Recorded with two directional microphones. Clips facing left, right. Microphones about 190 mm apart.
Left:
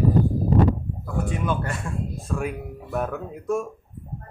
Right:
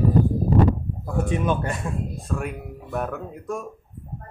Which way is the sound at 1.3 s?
20° right (ahead or behind).